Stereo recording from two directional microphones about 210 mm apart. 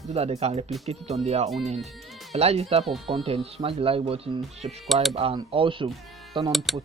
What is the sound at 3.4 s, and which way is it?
Speech, 30° right (ahead or behind).